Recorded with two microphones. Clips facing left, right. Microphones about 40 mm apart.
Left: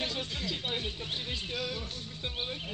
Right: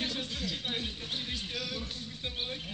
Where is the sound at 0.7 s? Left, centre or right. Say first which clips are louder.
Left 1 dB; centre.